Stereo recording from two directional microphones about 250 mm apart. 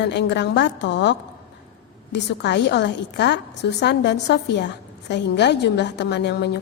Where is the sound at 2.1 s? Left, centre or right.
Left.